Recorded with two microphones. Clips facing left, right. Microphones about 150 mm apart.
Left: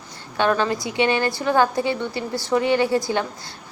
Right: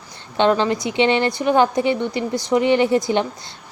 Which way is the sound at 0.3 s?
20° right (ahead or behind).